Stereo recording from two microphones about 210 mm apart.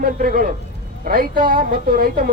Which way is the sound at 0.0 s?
40° right (ahead or behind).